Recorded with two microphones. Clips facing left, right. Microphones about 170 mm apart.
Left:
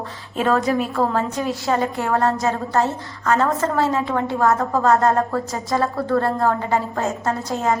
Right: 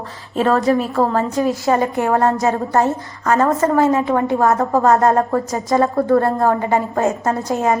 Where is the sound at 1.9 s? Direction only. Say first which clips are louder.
Right 4 dB; 20° right (ahead or behind).